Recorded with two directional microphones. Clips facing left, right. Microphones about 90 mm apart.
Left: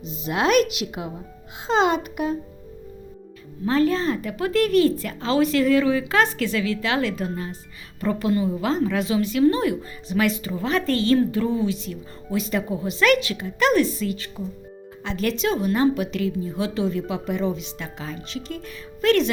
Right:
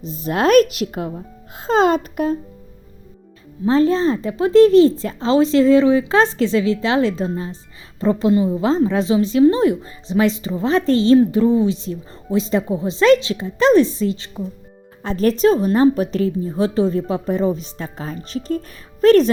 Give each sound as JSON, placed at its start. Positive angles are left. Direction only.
{"t": 0.0, "sound": "a woman's voice", "side_deg": -40}
{"t": 3.7, "sound": "a woman's voice", "side_deg": -30}
{"t": 15.0, "sound": "a woman's voice", "side_deg": -40}